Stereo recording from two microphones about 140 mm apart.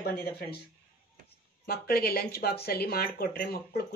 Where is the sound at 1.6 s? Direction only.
90° left.